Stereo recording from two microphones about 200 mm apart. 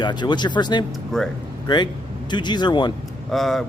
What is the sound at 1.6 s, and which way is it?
Speech, 20° left (ahead or behind).